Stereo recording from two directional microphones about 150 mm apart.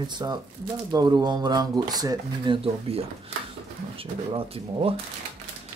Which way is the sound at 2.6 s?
40° right (ahead or behind).